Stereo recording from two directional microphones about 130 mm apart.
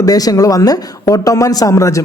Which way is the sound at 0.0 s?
30° left (ahead or behind).